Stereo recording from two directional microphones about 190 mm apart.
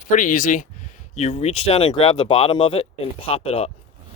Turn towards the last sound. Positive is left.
turn(degrees=30)  # may be behind; listen again after turning